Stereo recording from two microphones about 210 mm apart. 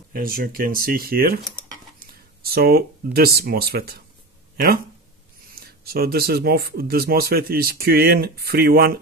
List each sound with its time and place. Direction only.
0.1 s speech: 45° right (ahead or behind)
2.4 s speech: 45° right (ahead or behind)
5.5 s speech: 45° right (ahead or behind)